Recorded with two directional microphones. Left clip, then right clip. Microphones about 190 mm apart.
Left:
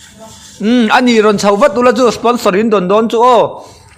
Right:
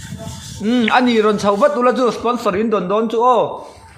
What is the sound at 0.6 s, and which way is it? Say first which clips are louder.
A man's voice: left 5 dB; 35° left (ahead or behind).